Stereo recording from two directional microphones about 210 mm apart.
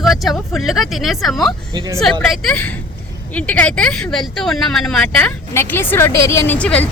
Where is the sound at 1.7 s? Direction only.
15° right (ahead or behind).